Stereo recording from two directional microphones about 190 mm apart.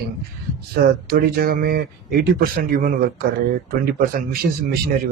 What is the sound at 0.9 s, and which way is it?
Speech, 50° right (ahead or behind).